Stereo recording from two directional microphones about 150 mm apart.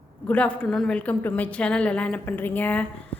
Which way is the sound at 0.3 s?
10° left (ahead or behind).